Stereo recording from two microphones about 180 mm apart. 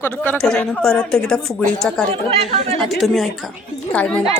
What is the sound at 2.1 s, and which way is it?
Speech, 35° right (ahead or behind).